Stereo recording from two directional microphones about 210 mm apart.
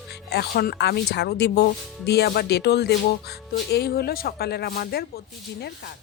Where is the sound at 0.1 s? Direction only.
50° left (ahead or behind).